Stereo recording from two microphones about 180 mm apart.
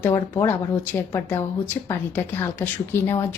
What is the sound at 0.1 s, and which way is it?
A woman's voice, 15° left (ahead or behind).